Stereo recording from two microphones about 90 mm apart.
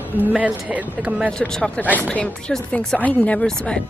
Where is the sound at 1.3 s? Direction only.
10° left (ahead or behind).